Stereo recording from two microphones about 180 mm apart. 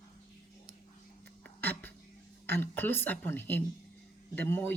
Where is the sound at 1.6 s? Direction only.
10° left (ahead or behind).